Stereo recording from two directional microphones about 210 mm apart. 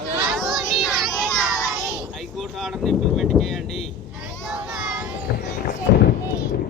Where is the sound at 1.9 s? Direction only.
Centre (ahead or behind).